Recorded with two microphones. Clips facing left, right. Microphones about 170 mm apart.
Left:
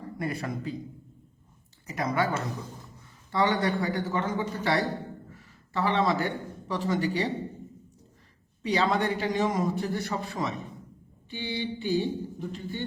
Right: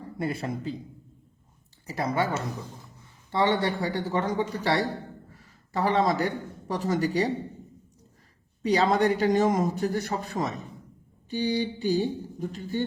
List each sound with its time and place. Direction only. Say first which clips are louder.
0.0 s a man's voice: right 2 dB; 30° right (ahead or behind)
1.9 s speech: right 1 dB; 30° right (ahead or behind)
3.3 s a man's voice: right 1 dB; 30° right (ahead or behind)
8.6 s a man's voice: right 4 dB; 40° right (ahead or behind)